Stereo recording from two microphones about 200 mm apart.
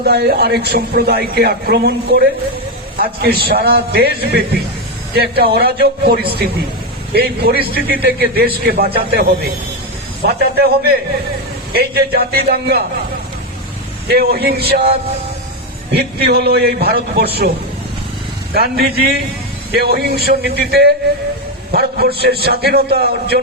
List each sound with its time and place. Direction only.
0.0 s speech: 50° right (ahead or behind)
14.1 s speech: 50° right (ahead or behind)
16.0 s speech: 50° right (ahead or behind)
18.5 s speech: 50° right (ahead or behind)